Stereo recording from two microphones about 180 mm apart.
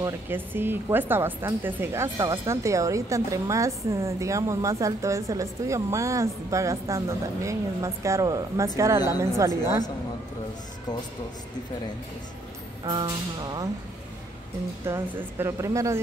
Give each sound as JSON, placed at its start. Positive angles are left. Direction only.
{"t": 0.0, "sound": "speech", "side_deg": -10}
{"t": 12.8, "sound": "a sound", "side_deg": -25}
{"t": 14.8, "sound": "speech", "side_deg": -15}